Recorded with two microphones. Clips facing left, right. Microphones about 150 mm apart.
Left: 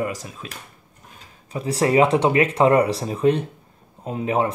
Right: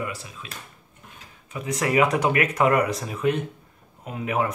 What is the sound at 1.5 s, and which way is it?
Speech, 30° left (ahead or behind).